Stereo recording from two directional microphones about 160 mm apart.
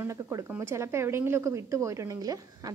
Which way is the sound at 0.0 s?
20° right (ahead or behind).